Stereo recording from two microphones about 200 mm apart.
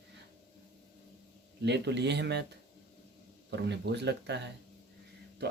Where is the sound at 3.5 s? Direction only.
60° right (ahead or behind).